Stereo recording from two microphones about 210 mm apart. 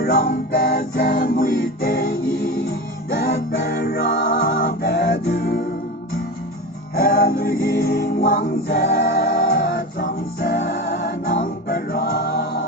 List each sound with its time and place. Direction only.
0.0 s music: 45° left (ahead or behind)
6.9 s music: 45° left (ahead or behind)